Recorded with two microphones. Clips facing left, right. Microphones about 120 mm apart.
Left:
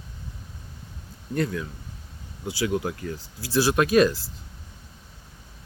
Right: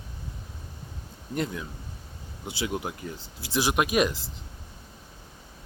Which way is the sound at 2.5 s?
20° right (ahead or behind).